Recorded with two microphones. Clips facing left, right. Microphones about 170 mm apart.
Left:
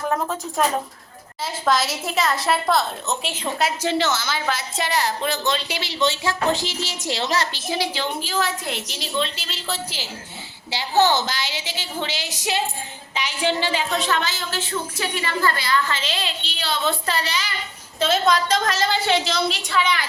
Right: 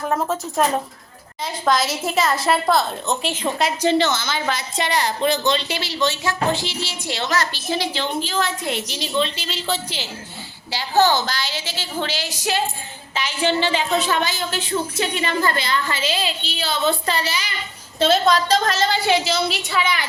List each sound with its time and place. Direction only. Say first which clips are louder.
1.5 s a woman's voice: right 1 dB; centre (ahead or behind); by 6.3 s 25° left (ahead or behind)
6.5 s speech: even; 40° left (ahead or behind)
7.5 s a woman's voice: right 1 dB; 10° left (ahead or behind)
10.7 s a woman's voice: right 1 dB; 20° left (ahead or behind)
13.9 s a woman's voice: right 3 dB; 10° right (ahead or behind)
16.0 s a woman's voice: right 4 dB; 5° right (ahead or behind)
18.0 s a woman's voice: right 3 dB; 30° right (ahead or behind)
19.0 s a woman's voice: right 2 dB; 5° right (ahead or behind)